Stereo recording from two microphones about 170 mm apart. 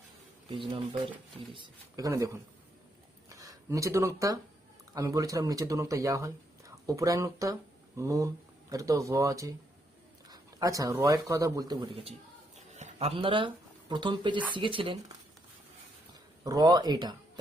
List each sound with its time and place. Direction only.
0.5 s speech: 30° right (ahead or behind)
3.2 s a sound: 20° right (ahead or behind)
4.9 s speech: 20° right (ahead or behind)
12.5 s a sound: 45° right (ahead or behind); by 14.4 s 25° right (ahead or behind)
14.5 s speech: 30° right (ahead or behind)
16.4 s speech: 20° right (ahead or behind)